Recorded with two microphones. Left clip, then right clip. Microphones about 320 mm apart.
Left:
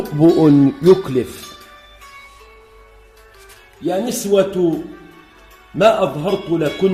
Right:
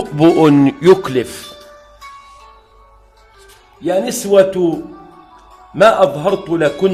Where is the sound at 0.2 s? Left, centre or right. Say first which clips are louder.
Right 2 dB; right.